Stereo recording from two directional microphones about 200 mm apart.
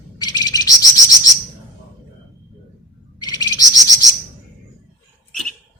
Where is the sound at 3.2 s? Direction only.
20° left (ahead or behind).